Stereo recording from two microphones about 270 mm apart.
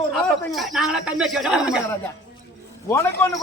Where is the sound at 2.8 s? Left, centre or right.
Centre.